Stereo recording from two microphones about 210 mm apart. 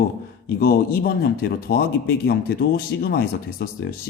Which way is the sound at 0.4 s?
45° left (ahead or behind).